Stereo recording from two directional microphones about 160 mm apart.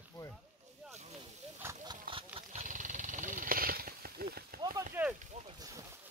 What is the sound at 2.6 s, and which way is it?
Wild animals, 50° right (ahead or behind).